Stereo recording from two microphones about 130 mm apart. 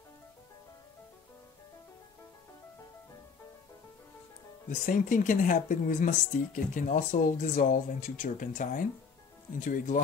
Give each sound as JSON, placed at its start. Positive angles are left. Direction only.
{"t": 4.6, "sound": "speech", "side_deg": 85}